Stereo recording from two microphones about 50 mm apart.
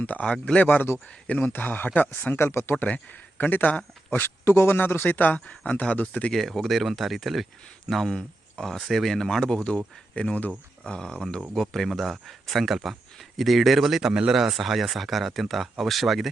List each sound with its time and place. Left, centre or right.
0.0 s speech: left
2.7 s speech: left
4.4 s speech: left
6.3 s speech: centre
11.5 s speech: centre
14.1 s speech: centre
14.3 s speech: centre